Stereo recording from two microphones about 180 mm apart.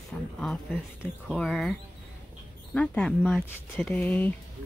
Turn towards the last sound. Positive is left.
turn(degrees=10)  # may be behind; listen again after turning